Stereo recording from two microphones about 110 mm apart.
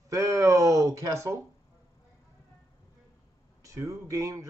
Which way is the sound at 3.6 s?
30° right (ahead or behind).